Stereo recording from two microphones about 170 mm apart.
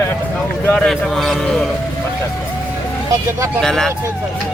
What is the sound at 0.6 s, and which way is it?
Speech, 5° left (ahead or behind).